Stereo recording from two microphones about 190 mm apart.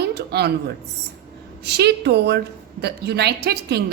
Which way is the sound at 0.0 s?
60° right (ahead or behind).